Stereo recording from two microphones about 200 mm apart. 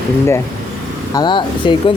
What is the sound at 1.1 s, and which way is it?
Speech, 20° left (ahead or behind).